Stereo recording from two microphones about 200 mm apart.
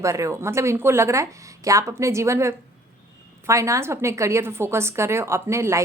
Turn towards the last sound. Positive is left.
turn(degrees=-15)  # may be behind; listen again after turning